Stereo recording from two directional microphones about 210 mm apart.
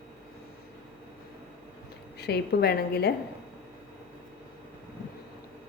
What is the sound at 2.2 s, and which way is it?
Speech, 50° left (ahead or behind).